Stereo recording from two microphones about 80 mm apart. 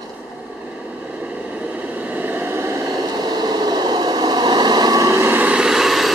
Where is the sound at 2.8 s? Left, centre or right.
Right.